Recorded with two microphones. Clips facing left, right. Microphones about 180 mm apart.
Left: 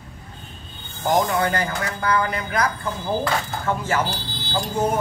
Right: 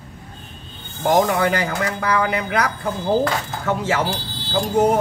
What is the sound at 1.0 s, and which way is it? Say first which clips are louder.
A man's voice: right 3 dB; 65° right (ahead or behind).